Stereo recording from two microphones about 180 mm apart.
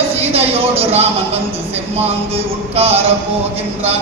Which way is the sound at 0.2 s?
35° right (ahead or behind).